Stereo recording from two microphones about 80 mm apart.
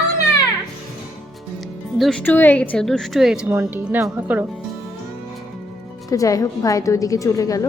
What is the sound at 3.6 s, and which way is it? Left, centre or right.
Speech, right.